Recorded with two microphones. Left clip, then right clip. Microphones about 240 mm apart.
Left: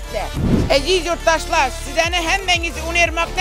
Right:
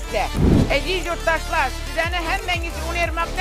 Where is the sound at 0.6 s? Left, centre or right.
Left.